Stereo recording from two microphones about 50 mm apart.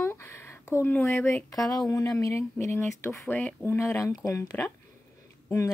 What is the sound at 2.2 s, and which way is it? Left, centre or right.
Speech, left.